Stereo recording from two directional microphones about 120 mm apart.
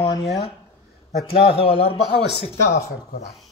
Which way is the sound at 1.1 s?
50° left (ahead or behind).